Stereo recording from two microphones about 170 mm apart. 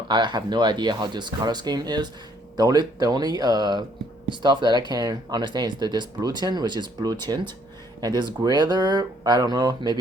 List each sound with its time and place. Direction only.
0.1 s speech: 25° right (ahead or behind)